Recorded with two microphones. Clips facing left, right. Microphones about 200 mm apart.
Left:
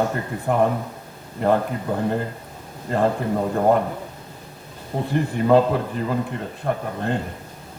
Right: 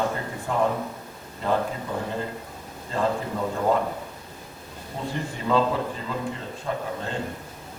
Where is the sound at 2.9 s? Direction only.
55° left (ahead or behind).